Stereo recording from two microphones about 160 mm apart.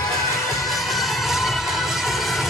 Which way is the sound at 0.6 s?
Centre (ahead or behind).